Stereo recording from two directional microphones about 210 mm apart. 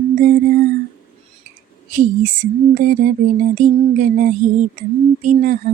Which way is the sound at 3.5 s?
35° right (ahead or behind).